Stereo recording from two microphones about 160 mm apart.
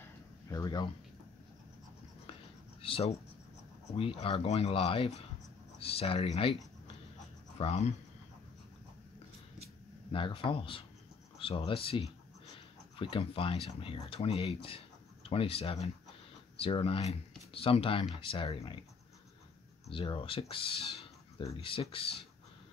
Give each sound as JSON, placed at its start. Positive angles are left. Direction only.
{"t": 0.5, "sound": "a sound", "side_deg": 25}
{"t": 2.8, "sound": "speech", "side_deg": 35}
{"t": 7.5, "sound": "speech", "side_deg": 40}
{"t": 10.1, "sound": "speech", "side_deg": 30}
{"t": 19.9, "sound": "speech", "side_deg": 35}